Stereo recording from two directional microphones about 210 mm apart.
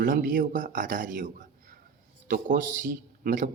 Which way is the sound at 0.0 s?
40° right (ahead or behind).